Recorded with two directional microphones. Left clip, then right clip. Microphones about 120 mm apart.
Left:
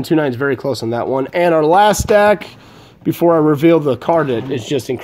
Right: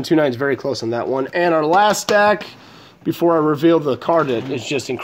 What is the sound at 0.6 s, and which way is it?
Speech, 30° left (ahead or behind).